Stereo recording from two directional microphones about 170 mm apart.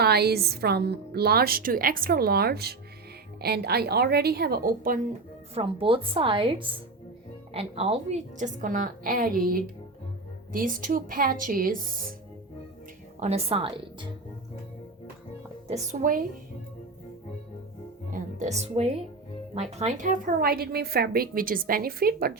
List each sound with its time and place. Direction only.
0.0 s a woman's voice: 70° right (ahead or behind)
5.5 s a woman's voice: 30° right (ahead or behind); by 9.3 s 55° right (ahead or behind)
10.5 s a woman's voice: 55° right (ahead or behind)
13.1 s a woman's voice: 40° right (ahead or behind)
15.6 s speech: 40° right (ahead or behind)
18.1 s a woman's voice: 45° right (ahead or behind); by 22.3 s 60° right (ahead or behind)